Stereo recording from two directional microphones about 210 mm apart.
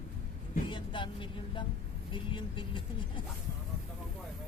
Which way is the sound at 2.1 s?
25° left (ahead or behind).